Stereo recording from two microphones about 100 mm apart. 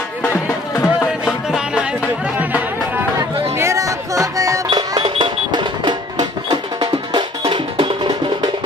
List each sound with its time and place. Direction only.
0.3 s music: 30° left (ahead or behind)
1.2 s music: 5° right (ahead or behind)
2.3 s music: 15° right (ahead or behind)
3.2 s music: 30° right (ahead or behind)
4.6 s music: 55° right (ahead or behind)
7.4 s music: 60° right (ahead or behind)